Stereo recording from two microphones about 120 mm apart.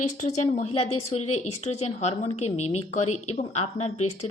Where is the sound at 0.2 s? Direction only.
80° left.